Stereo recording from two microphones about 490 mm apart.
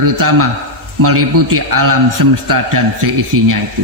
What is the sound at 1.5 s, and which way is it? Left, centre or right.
A man's voice, right.